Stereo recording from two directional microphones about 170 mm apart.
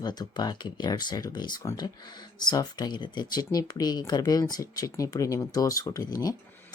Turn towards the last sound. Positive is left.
turn(degrees=20)  # may be behind; listen again after turning